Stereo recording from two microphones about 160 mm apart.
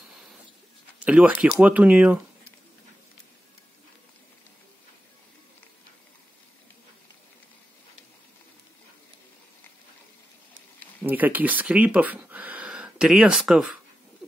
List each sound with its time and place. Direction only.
1.0 s speech: 10° right (ahead or behind)
11.1 s speech: 10° right (ahead or behind)